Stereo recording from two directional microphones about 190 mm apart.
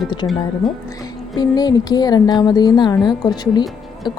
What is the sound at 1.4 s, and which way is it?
Music, 20° left (ahead or behind).